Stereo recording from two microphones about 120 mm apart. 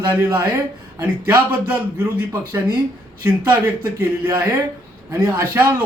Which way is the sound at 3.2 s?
20° right (ahead or behind).